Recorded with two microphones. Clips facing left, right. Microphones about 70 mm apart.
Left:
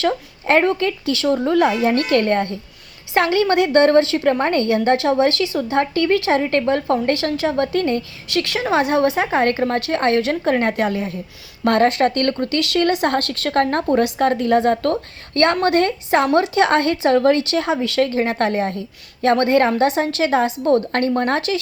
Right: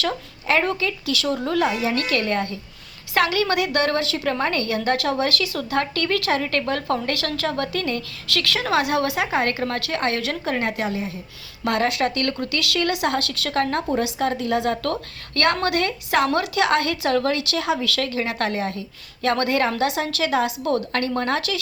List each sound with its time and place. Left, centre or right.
0.4 s speech: left
1.6 s a woman's voice: left
11.6 s speech: left